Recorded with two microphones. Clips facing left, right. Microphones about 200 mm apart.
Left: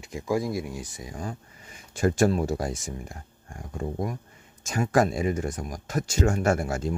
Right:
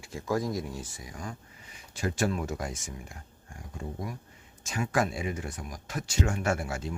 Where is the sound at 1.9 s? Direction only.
45° left (ahead or behind).